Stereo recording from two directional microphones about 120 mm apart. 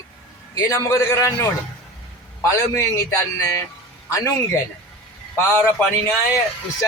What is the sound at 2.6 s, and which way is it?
A man's voice, 25° left (ahead or behind).